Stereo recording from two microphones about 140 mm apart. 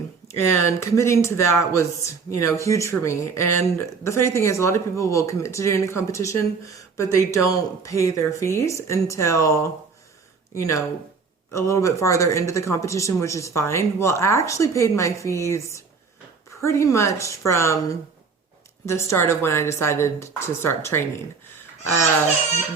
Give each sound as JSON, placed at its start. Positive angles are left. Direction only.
{"t": 0.3, "sound": "speech", "side_deg": 20}